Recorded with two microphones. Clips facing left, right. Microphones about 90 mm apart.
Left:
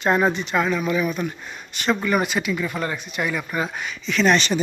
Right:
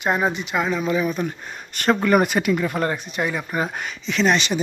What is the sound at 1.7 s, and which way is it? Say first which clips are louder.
Speech: right 4 dB; 50° right (ahead or behind).